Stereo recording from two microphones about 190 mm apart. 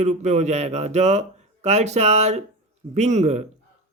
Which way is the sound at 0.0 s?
40° right (ahead or behind).